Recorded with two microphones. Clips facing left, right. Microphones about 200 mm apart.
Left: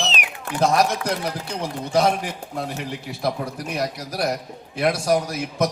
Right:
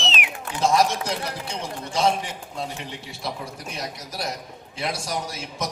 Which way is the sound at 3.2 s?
60° left (ahead or behind).